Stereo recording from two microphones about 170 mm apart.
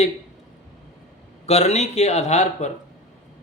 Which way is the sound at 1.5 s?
40° left (ahead or behind).